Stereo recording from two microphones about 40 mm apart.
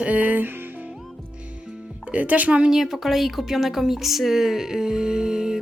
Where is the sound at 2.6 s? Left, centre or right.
Centre.